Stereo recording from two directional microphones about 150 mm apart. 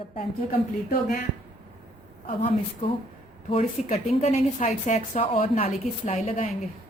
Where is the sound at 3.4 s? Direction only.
45° left (ahead or behind).